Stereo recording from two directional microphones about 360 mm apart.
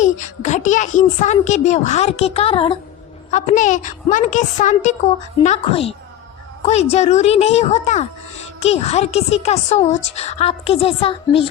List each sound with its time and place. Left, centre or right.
0.0 s a woman's voice: centre